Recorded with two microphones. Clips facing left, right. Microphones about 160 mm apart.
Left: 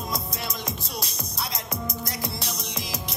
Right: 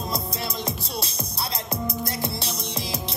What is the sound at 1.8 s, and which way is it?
Music, 30° right (ahead or behind).